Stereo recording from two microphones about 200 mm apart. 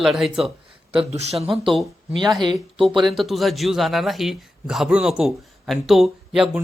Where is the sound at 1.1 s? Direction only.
35° right (ahead or behind).